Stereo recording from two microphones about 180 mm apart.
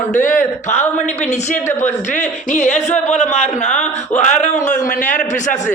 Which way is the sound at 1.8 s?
40° left (ahead or behind).